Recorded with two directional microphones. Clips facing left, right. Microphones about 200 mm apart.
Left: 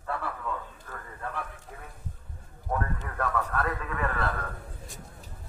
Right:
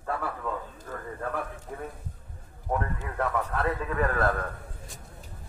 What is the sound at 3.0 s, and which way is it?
A man's voice, 25° right (ahead or behind).